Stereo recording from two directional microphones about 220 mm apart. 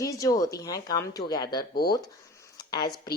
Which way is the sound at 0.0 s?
15° left (ahead or behind).